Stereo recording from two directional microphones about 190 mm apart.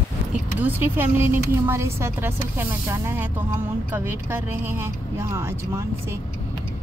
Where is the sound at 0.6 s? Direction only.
10° right (ahead or behind).